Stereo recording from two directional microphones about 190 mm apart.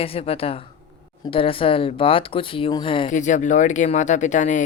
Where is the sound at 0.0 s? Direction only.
30° left (ahead or behind).